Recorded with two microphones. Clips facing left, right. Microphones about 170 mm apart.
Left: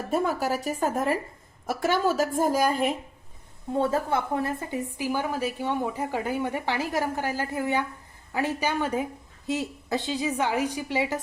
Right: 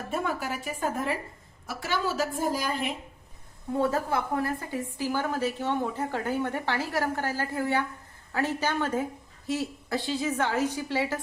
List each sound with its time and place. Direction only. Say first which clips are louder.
0.1 s a woman's voice: left 5 dB; 40° left (ahead or behind)
3.8 s a woman's voice: left 2 dB; 25° left (ahead or behind)